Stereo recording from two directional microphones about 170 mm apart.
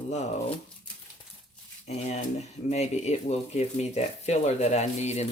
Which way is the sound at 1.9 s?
40° left (ahead or behind).